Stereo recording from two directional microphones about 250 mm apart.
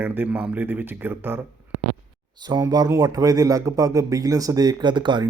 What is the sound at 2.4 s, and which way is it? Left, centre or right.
A man's voice, centre.